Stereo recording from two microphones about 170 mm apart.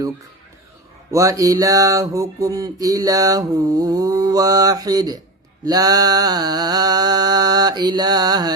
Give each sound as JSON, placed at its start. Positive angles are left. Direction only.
{"t": 1.1, "sound": "mantra", "side_deg": -20}